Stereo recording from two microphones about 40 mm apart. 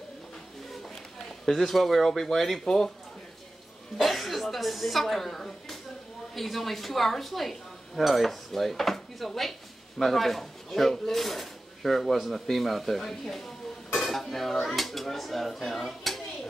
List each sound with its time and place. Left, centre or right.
1.4 s speech: centre
4.0 s speech: centre